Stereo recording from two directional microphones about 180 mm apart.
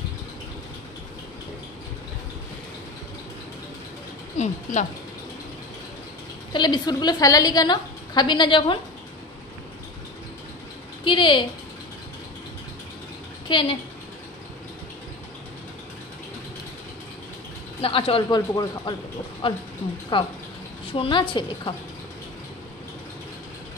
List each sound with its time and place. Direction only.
4.4 s a sound: 40° left (ahead or behind)
6.5 s a woman's voice: 25° left (ahead or behind)
11.1 s a woman's voice: 25° left (ahead or behind)
13.5 s speech: 30° left (ahead or behind)
17.8 s a woman's voice: 30° left (ahead or behind)